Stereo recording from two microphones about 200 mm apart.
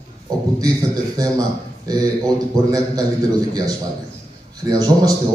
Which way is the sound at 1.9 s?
20° right (ahead or behind).